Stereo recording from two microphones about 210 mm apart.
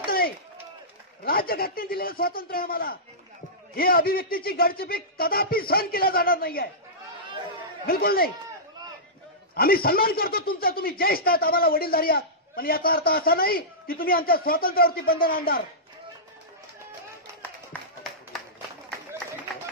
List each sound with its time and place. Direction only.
0.0 s run: 45° left (ahead or behind)
1.2 s speech: 45° left (ahead or behind)
7.8 s speech: 45° left (ahead or behind)
9.6 s speech: 45° left (ahead or behind)
17.7 s clapping: 10° left (ahead or behind)